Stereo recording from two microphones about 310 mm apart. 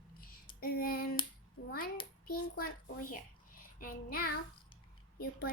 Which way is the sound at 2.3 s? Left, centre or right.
Left.